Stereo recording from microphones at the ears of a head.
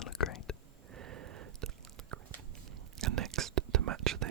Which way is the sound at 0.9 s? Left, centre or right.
Right.